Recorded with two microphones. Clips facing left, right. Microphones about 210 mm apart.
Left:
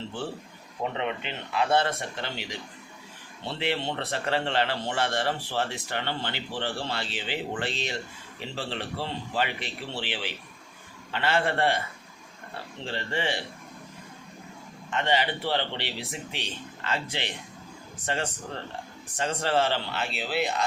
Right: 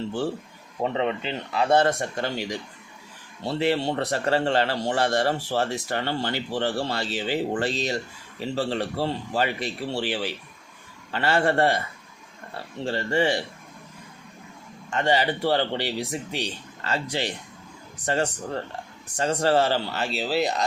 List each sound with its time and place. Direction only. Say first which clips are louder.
0.8 s a man's voice: right 5 dB; 35° right (ahead or behind)
11.1 s a man's voice: right 4 dB; 40° right (ahead or behind)
12.8 s a man's voice: right 7 dB; 45° right (ahead or behind)
14.8 s a man's voice: right 4 dB; 40° right (ahead or behind)